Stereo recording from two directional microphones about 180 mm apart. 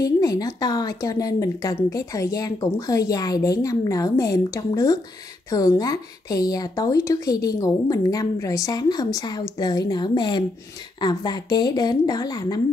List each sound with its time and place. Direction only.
0.0 s a woman's voice: 20° left (ahead or behind)